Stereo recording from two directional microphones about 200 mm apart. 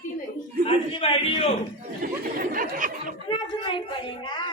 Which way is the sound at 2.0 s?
45° right (ahead or behind).